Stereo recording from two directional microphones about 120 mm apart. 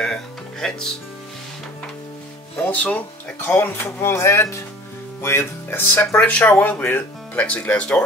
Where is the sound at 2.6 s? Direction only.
15° left (ahead or behind).